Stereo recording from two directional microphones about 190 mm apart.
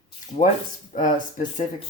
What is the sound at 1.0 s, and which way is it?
Speech, 45° left (ahead or behind).